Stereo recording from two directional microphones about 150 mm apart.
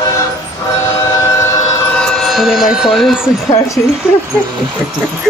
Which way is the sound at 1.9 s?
5° left (ahead or behind).